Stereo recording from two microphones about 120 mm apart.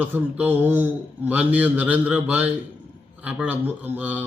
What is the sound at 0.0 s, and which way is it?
Speech, 15° right (ahead or behind).